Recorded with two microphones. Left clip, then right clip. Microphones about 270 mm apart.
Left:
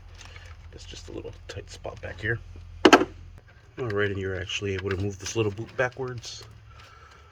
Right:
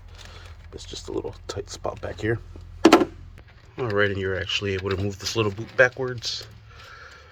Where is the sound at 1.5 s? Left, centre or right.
Centre.